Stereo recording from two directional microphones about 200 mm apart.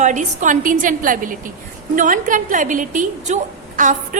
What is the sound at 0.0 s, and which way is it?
A woman's voice, 40° right (ahead or behind).